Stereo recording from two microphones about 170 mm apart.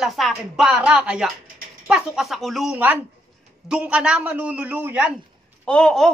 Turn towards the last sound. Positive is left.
turn(degrees=5)  # may be behind; listen again after turning